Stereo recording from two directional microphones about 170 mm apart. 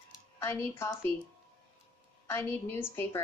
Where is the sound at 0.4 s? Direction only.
15° left (ahead or behind).